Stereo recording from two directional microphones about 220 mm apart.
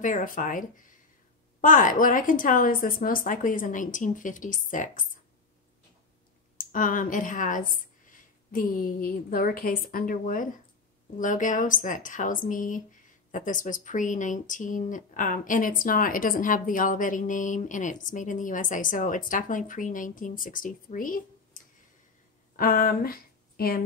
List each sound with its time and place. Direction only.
0.0 s speech: 35° left (ahead or behind)
6.6 s speech: 35° left (ahead or behind)
22.6 s a sound: 40° left (ahead or behind)